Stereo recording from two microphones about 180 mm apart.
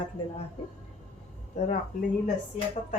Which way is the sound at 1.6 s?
40° left (ahead or behind).